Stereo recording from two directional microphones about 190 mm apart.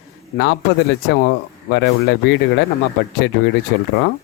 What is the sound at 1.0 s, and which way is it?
A man's voice, 65° left (ahead or behind).